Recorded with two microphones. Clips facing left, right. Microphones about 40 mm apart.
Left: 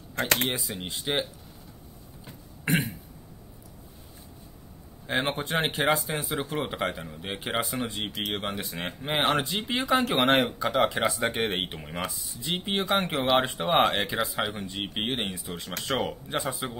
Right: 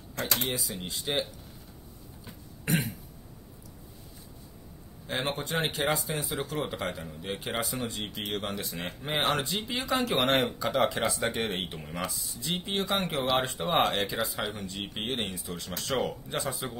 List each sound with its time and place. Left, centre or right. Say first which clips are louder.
0.1 s speech: left 5 dB; left
0.6 s speech: left 2 dB; left
2.6 s throat clearing: left 3 dB; left
5.0 s speech: left 4 dB; left
11.3 s speech: left 3 dB; left; by 16.7 s centre